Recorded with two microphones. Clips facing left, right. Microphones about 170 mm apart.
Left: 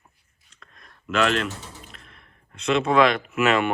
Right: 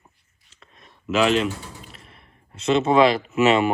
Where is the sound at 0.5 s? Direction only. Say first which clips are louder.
Right 1 dB; 5° right (ahead or behind).